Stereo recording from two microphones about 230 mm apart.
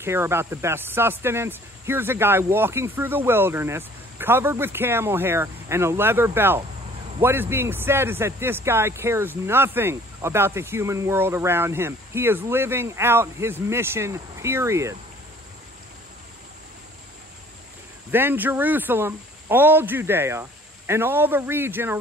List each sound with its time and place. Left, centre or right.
0.0 s speech: centre
18.1 s speech: centre